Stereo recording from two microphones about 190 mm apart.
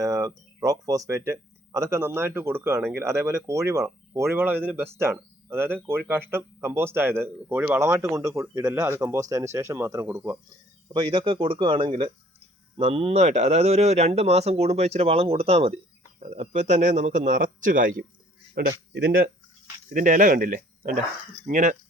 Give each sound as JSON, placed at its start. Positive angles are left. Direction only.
{"t": 0.0, "sound": "speech", "side_deg": -20}
{"t": 10.8, "sound": "speech", "side_deg": -25}
{"t": 18.6, "sound": "speech", "side_deg": -55}
{"t": 19.9, "sound": "speech", "side_deg": -45}